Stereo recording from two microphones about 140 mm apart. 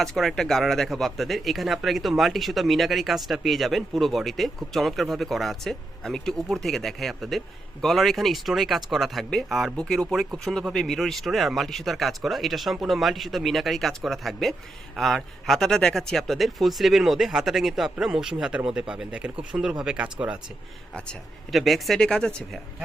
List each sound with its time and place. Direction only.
0.0 s speech: centre (ahead or behind)
20.9 s speech: 5° left (ahead or behind)